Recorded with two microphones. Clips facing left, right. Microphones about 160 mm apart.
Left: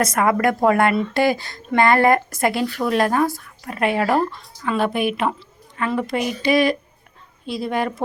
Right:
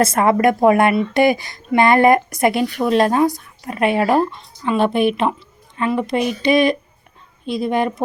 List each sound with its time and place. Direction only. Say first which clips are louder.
0.0 s a woman's voice: right 4 dB; 30° right (ahead or behind)